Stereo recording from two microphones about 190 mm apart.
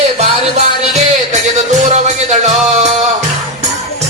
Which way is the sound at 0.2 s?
35° right (ahead or behind).